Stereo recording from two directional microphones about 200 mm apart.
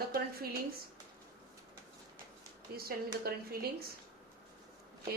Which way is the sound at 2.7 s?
50° right (ahead or behind).